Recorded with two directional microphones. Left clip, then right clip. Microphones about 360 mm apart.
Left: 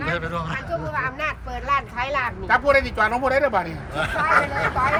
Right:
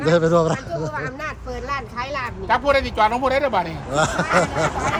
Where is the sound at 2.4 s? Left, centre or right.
Centre.